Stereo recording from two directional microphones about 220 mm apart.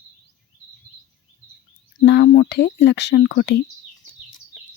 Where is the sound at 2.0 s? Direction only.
50° left (ahead or behind).